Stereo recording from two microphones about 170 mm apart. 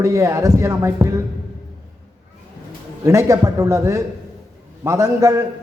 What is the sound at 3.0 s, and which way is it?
A man's voice, 15° right (ahead or behind).